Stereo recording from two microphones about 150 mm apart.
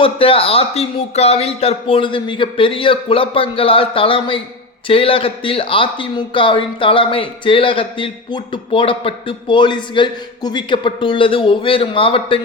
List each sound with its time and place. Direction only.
0.0 s speech: 40° left (ahead or behind)